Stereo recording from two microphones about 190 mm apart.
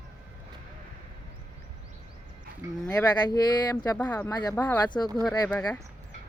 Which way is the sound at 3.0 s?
20° left (ahead or behind).